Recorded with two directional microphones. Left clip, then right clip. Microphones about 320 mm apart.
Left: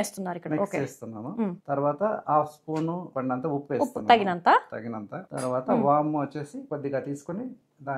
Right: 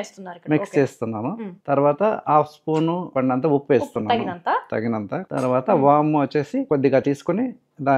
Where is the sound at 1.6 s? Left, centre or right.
Right.